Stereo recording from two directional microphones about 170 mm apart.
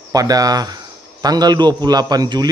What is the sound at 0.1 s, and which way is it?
A man's voice, 20° right (ahead or behind).